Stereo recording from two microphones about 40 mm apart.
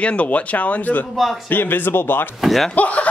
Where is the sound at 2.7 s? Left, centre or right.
Left.